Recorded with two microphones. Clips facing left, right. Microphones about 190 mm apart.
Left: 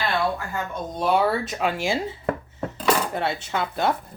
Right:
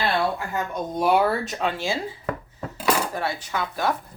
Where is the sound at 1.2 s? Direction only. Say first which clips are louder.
Even; 5° left (ahead or behind).